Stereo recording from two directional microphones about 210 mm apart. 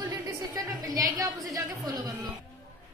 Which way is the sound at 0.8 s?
15° right (ahead or behind).